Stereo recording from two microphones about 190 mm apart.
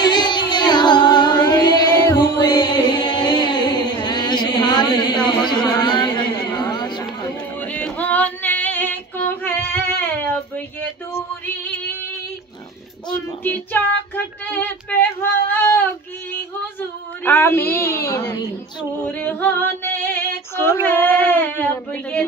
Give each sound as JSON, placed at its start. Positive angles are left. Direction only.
{"t": 0.0, "sound": "music", "side_deg": 25}
{"t": 7.6, "sound": "female singing", "side_deg": 5}
{"t": 13.4, "sound": "female singing", "side_deg": 10}
{"t": 17.2, "sound": "female singing", "side_deg": 10}
{"t": 19.0, "sound": "female singing", "side_deg": 10}